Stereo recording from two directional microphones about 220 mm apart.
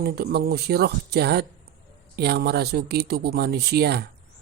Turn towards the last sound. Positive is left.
turn(degrees=-45)  # may be behind; listen again after turning